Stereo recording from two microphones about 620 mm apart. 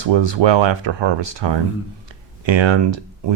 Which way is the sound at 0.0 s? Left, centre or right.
Right.